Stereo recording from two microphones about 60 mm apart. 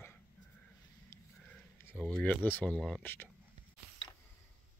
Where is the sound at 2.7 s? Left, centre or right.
Centre.